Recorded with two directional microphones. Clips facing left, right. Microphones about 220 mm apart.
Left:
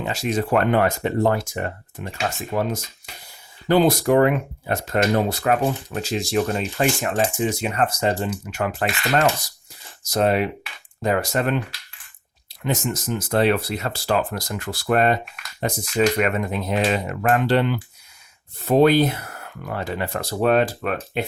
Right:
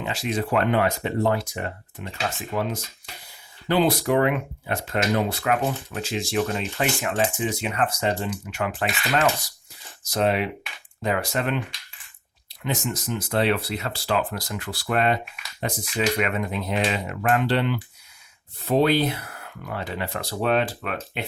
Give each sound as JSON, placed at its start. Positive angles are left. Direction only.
{"t": 0.0, "sound": "speech", "side_deg": 40}
{"t": 12.6, "sound": "speech", "side_deg": 45}